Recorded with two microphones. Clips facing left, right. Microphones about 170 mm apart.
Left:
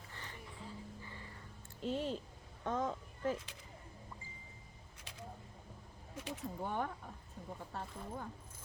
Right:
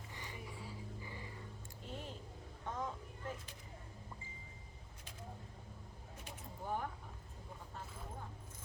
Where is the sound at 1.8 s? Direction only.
90° left.